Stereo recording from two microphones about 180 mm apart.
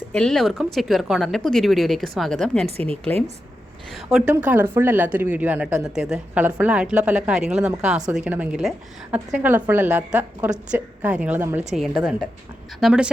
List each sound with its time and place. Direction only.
0.1 s speech: 5° left (ahead or behind)
2.7 s a woman's voice: 35° right (ahead or behind)
3.9 s speech: 5° right (ahead or behind)